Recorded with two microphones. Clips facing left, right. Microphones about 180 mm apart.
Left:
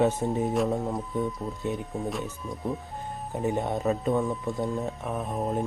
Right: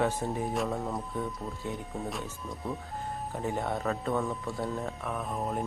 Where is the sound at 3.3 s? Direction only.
20° left (ahead or behind).